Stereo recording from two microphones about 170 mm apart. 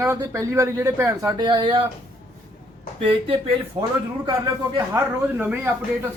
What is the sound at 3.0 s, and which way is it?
Speech, 30° right (ahead or behind).